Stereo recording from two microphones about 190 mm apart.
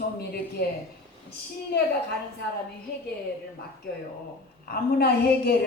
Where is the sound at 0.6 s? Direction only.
55° left (ahead or behind).